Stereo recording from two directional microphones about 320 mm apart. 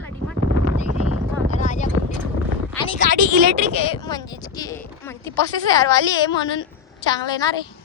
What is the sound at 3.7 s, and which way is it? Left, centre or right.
Speech, centre.